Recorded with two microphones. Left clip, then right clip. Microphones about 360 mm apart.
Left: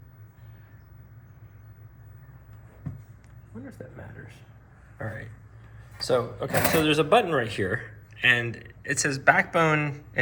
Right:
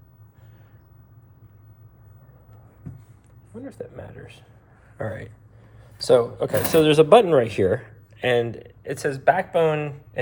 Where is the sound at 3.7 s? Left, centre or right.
Right; by 10.2 s centre.